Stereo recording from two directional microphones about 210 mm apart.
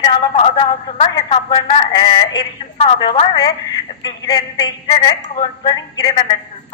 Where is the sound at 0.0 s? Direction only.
25° left (ahead or behind).